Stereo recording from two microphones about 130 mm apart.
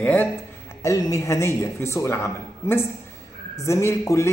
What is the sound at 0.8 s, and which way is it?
Speech, 25° left (ahead or behind).